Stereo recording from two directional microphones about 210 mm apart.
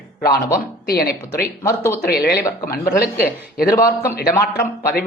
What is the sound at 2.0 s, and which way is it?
Speech, 45° left (ahead or behind).